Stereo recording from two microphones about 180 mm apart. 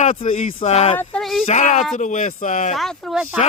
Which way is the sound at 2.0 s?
45° left (ahead or behind).